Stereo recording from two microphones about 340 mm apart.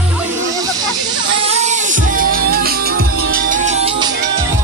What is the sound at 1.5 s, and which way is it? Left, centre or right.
Music, centre.